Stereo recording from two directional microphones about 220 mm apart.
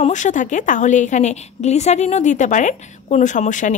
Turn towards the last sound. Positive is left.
turn(degrees=35)  # may be behind; listen again after turning